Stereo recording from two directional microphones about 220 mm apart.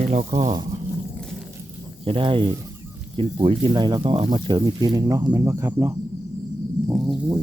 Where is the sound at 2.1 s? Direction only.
25° right (ahead or behind); by 7.2 s 10° right (ahead or behind).